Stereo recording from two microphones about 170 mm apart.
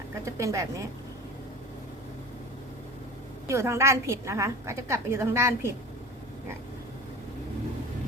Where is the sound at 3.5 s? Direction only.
15° right (ahead or behind).